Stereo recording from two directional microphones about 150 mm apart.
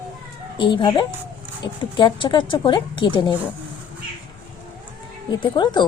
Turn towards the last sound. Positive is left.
turn(degrees=30)  # may be behind; listen again after turning